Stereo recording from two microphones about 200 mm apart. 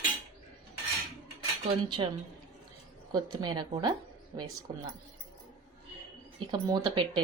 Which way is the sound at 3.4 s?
20° right (ahead or behind).